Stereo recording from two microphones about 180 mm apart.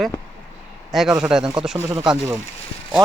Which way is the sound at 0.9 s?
Centre (ahead or behind).